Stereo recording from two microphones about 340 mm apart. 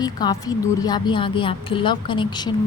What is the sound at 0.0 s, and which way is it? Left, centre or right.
A woman's voice, centre.